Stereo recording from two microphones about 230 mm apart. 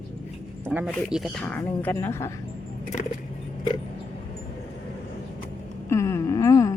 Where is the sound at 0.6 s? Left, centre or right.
Centre.